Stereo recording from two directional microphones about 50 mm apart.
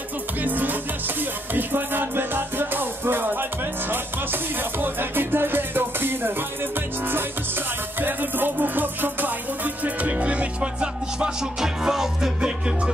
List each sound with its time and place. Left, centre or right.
0.4 s music: right
8.0 s music: right; by 12.9 s centre